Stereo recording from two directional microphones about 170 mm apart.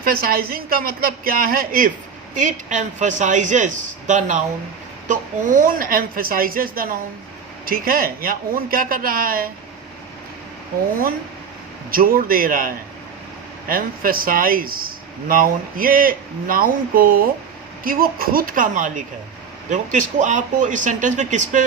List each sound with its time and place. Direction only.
0.0 s speech: 60° right (ahead or behind)
11.9 s speech: 55° right (ahead or behind)